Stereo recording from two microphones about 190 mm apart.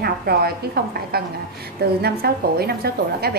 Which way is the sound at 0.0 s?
55° right (ahead or behind).